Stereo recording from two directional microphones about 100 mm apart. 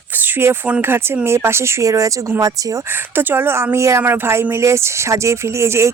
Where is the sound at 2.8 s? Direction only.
20° right (ahead or behind).